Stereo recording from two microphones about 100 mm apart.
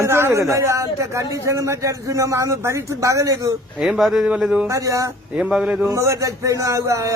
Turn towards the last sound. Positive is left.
turn(degrees=-30)  # may be behind; listen again after turning